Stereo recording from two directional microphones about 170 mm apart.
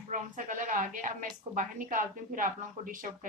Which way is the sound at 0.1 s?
50° right (ahead or behind).